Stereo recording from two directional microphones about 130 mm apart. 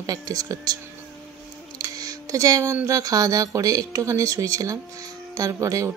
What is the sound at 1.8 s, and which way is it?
Speech, 25° right (ahead or behind).